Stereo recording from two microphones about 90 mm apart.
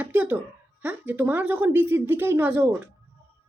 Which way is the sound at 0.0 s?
20° right (ahead or behind).